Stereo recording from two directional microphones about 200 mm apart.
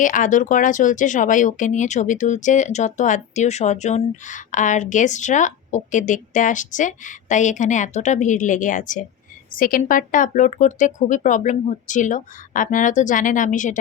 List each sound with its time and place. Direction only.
0.0 s speech: 40° left (ahead or behind)